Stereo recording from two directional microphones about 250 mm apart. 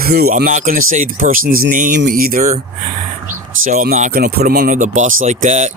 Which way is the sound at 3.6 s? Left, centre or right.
Right.